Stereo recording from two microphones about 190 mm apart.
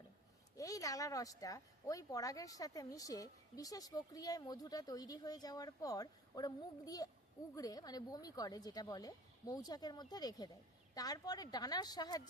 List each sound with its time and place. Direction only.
0.5 s a woman's voice: 15° left (ahead or behind)